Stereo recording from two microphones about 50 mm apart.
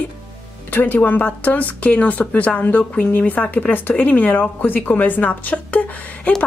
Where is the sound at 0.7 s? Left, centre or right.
Left.